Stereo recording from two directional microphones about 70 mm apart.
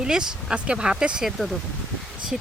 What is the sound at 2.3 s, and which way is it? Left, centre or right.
Speech, centre.